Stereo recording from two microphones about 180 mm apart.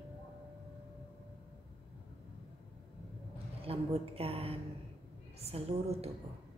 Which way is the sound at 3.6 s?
35° right (ahead or behind).